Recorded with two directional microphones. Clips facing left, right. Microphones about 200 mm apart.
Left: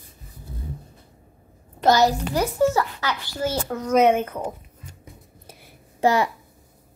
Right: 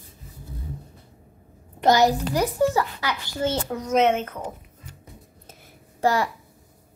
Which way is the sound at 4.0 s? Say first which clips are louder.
Left 3 dB; 10° left (ahead or behind).